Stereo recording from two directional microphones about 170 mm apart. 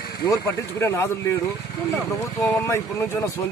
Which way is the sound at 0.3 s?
15° left (ahead or behind).